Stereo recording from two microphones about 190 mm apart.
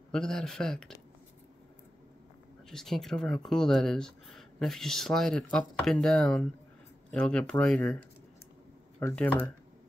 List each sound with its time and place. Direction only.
0.1 s speech: 5° left (ahead or behind)
2.7 s speech: centre (ahead or behind)
9.0 s speech: 10° left (ahead or behind)